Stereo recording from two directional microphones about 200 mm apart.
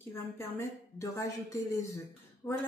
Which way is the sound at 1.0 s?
15° left (ahead or behind).